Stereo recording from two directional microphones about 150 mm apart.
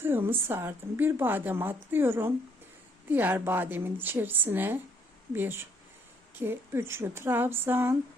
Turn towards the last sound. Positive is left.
turn(degrees=-15)  # may be behind; listen again after turning